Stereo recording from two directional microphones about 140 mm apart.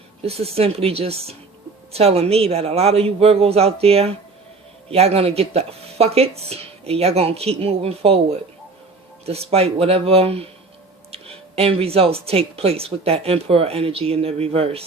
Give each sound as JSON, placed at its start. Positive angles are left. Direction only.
{"t": 0.2, "sound": "speech", "side_deg": -45}